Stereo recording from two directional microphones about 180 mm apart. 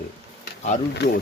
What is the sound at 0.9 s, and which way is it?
Speech, 65° left (ahead or behind).